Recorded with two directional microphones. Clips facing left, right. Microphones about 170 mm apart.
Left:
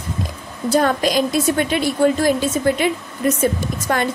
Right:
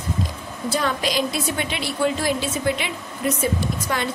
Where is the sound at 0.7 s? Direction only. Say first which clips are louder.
Left 7 dB; 45° left (ahead or behind).